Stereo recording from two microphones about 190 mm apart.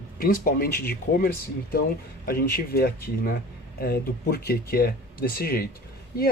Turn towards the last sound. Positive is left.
turn(degrees=55)  # may be behind; listen again after turning